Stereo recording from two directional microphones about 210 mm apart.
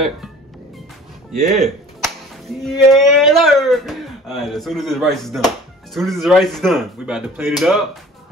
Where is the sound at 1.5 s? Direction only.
Centre (ahead or behind).